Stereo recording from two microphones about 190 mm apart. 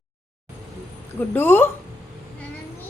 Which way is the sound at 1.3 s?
10° left (ahead or behind).